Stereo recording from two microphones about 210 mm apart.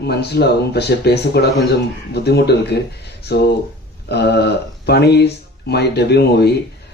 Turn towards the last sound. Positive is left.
turn(degrees=50)  # may be behind; listen again after turning